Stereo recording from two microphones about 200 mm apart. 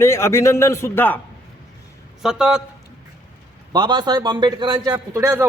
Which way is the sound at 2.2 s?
5° right (ahead or behind).